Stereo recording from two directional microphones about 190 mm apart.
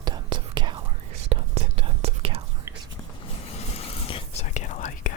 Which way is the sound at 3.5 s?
35° left (ahead or behind).